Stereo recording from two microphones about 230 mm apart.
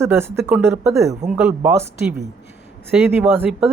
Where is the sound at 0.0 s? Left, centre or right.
Centre.